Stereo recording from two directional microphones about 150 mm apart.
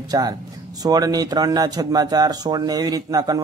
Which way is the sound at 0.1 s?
25° right (ahead or behind).